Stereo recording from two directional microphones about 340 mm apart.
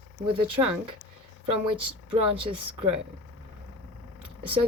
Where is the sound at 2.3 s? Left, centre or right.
Centre.